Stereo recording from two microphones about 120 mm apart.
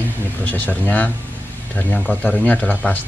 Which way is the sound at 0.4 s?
15° left (ahead or behind).